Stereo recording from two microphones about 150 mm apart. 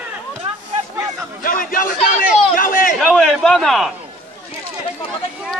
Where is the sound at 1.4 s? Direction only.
70° left (ahead or behind).